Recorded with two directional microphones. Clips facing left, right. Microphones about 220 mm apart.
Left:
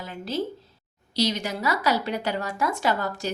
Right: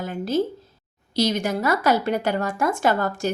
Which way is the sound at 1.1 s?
50° right (ahead or behind).